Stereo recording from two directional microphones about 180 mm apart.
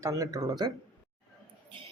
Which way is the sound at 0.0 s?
20° right (ahead or behind).